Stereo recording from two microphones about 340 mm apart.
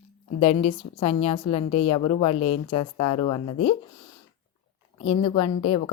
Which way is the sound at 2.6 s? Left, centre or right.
Left.